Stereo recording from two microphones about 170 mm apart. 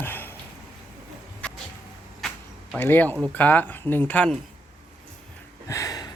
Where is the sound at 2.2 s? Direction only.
Centre (ahead or behind).